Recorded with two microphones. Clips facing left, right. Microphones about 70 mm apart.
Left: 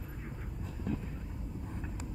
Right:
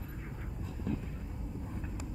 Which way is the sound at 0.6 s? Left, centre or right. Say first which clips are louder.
Even; centre.